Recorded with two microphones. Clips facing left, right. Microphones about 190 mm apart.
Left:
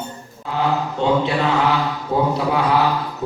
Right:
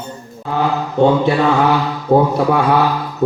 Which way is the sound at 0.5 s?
55° right (ahead or behind).